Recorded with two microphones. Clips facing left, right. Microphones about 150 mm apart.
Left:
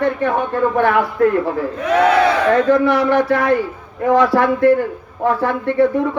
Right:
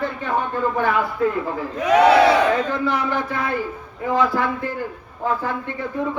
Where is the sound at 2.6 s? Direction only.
70° left (ahead or behind).